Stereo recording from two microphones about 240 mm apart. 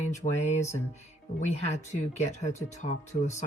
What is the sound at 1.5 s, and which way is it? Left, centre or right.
Speech, left.